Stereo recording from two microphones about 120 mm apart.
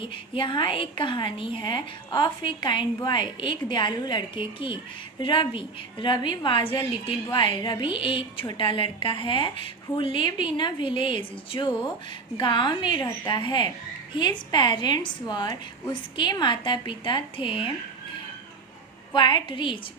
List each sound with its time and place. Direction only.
0.0 s a woman's voice: 45° left (ahead or behind)
19.1 s a woman's voice: 40° left (ahead or behind)